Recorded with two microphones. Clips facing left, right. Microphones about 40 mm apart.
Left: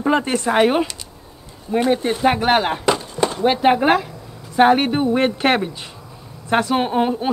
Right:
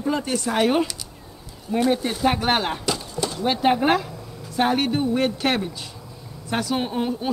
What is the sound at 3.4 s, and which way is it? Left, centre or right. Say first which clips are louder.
A woman's voice: left 4 dB; centre.